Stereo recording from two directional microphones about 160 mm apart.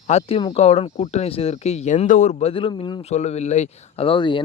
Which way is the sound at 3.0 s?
45° left (ahead or behind).